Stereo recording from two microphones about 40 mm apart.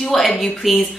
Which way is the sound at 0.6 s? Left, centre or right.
Centre.